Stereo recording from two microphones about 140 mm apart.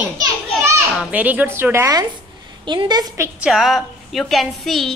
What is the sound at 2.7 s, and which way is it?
Speech, 30° right (ahead or behind).